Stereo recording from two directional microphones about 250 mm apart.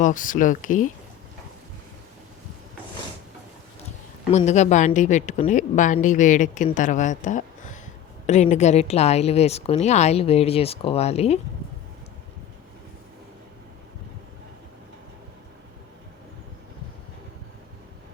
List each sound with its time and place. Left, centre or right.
0.0 s speech: left
4.3 s speech: left